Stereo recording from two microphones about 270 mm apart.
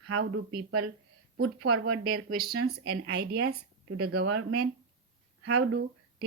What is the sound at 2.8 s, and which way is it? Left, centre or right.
Speech, right.